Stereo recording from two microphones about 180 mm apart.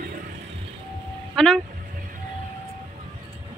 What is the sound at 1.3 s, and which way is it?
Speech, 5° left (ahead or behind).